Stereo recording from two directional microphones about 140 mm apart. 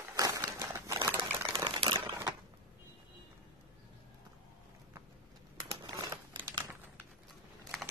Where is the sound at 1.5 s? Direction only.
35° right (ahead or behind).